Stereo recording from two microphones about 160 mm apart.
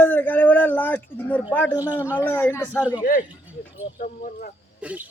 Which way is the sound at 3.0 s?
60° left (ahead or behind).